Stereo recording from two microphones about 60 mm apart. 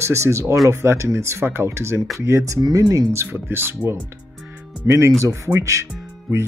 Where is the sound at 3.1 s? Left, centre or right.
Right.